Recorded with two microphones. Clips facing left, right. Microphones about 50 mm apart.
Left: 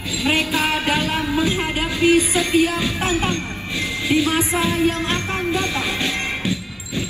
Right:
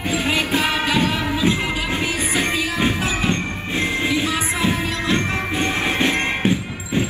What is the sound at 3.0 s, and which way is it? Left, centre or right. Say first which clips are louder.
Music: left 2 dB; left.